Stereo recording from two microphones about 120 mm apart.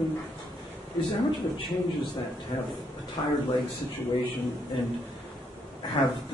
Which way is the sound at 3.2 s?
35° left (ahead or behind).